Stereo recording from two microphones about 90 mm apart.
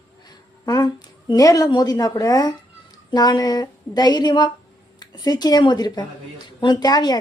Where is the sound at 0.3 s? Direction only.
45° left (ahead or behind).